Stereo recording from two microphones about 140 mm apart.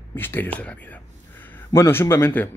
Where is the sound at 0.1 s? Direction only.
15° left (ahead or behind).